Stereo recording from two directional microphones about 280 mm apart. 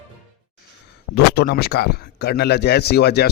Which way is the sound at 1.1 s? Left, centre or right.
Left.